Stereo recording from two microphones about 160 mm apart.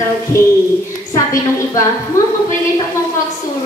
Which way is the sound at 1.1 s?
20° left (ahead or behind).